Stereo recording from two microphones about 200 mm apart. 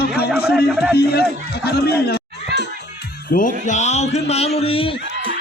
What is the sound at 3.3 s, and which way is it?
A man's voice, 40° left (ahead or behind).